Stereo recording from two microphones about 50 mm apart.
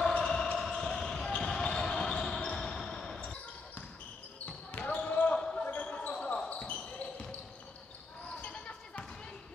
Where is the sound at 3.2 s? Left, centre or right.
Left.